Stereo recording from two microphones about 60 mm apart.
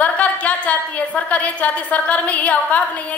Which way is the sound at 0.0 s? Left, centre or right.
Left.